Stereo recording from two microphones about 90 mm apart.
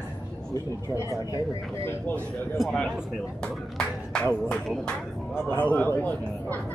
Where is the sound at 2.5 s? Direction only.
10° left (ahead or behind).